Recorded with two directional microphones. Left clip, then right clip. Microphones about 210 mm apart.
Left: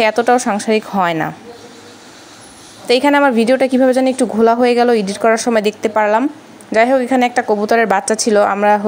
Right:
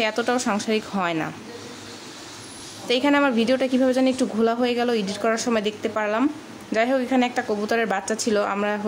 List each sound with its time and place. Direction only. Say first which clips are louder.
0.0 s a woman's voice: left 10 dB; 20° left (ahead or behind)
2.9 s a woman's voice: left 8 dB; 25° left (ahead or behind)